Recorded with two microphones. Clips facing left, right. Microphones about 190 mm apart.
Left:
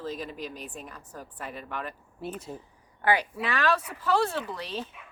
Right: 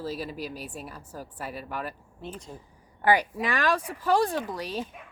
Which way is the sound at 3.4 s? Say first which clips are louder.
Left 2 dB; 15° right (ahead or behind).